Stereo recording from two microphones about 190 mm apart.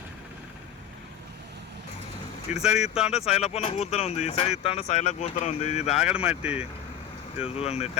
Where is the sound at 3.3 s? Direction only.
35° left (ahead or behind).